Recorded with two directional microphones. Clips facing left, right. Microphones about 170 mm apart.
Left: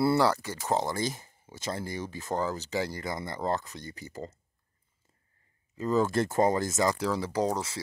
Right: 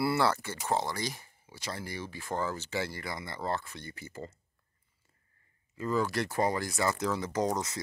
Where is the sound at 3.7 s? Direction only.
40° left (ahead or behind).